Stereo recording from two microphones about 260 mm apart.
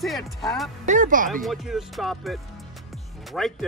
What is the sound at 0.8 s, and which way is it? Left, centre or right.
Speech, right.